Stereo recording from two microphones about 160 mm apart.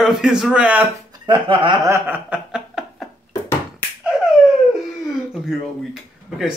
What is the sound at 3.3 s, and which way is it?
Beatboxing, 15° left (ahead or behind).